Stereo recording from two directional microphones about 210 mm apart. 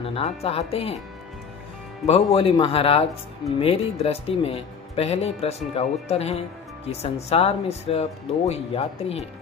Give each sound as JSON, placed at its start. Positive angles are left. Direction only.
{"t": 0.0, "sound": "speech", "side_deg": 25}
{"t": 2.0, "sound": "speech", "side_deg": 30}